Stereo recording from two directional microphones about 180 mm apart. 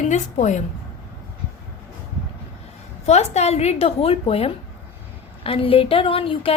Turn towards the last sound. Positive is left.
turn(degrees=30)  # may be behind; listen again after turning